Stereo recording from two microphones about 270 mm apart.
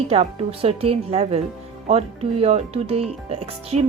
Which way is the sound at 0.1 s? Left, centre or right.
Right.